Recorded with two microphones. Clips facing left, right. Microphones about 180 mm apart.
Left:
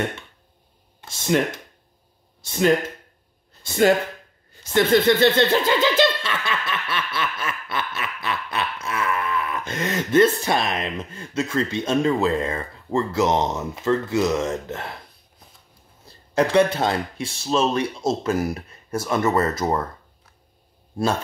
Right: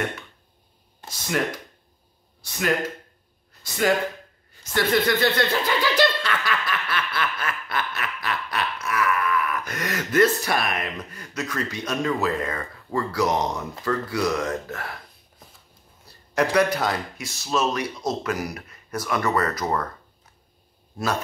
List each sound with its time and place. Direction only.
1.0 s speech: 25° left (ahead or behind)
2.4 s speech: 25° left (ahead or behind)
16.3 s speech: 25° left (ahead or behind)
21.0 s speech: 30° left (ahead or behind)